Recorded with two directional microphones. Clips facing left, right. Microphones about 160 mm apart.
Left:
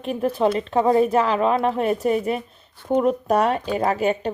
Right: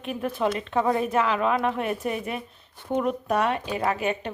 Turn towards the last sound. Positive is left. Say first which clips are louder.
# left 5 dB
turn(degrees=35)  # may be behind; listen again after turning